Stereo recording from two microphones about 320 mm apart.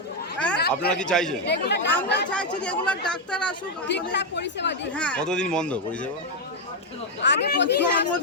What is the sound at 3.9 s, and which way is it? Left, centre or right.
Speech, left.